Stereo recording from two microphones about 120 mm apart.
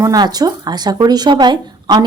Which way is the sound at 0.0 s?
30° right (ahead or behind).